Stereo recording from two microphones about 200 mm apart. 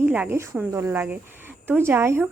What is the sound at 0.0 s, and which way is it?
A woman's voice, 10° right (ahead or behind).